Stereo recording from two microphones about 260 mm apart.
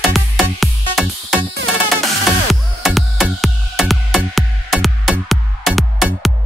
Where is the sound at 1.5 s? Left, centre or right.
Right.